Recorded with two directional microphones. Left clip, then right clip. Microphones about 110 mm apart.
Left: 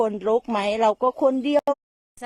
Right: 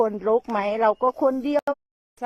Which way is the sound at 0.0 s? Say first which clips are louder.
Even; 15° left (ahead or behind).